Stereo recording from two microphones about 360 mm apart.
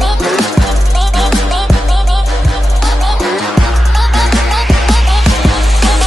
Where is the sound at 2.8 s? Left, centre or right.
Centre.